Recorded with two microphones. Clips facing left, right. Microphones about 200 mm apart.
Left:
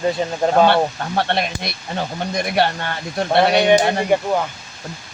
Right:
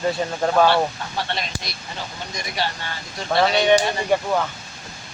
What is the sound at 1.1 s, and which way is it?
Speech, 60° left (ahead or behind).